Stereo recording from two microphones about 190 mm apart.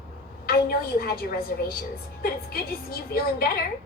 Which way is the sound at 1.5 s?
50° left (ahead or behind).